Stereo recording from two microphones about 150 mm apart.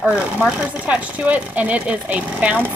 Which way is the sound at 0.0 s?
10° right (ahead or behind).